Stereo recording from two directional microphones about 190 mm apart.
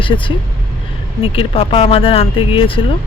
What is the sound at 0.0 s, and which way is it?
Speech, 25° left (ahead or behind).